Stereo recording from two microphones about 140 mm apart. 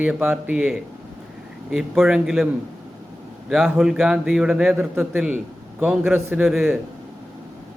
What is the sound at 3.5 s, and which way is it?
A man's voice, centre (ahead or behind).